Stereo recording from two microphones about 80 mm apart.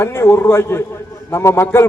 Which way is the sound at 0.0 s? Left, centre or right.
Left.